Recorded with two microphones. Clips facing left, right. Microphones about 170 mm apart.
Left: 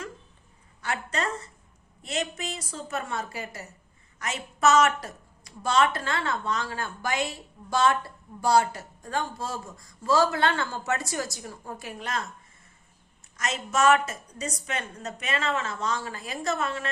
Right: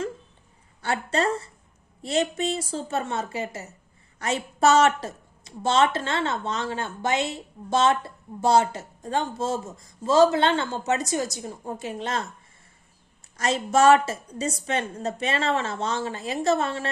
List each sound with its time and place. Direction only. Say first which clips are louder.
0.8 s a woman's voice: right 6 dB; 30° right (ahead or behind)
13.3 s a woman's voice: right 6 dB; 30° right (ahead or behind)